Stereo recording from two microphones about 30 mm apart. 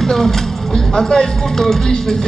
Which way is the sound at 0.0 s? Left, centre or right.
Centre.